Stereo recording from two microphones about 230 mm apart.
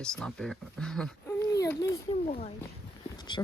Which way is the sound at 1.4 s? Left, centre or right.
Centre.